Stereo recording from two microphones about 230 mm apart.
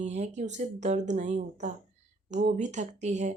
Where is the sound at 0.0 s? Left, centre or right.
Right.